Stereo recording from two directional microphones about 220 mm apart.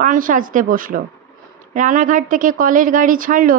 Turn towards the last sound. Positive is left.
turn(degrees=-40)  # may be behind; listen again after turning